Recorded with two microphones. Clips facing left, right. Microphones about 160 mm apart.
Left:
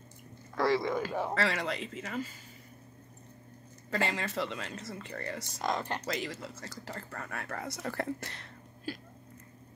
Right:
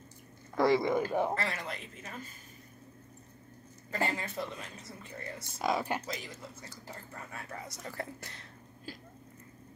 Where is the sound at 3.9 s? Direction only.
90° left.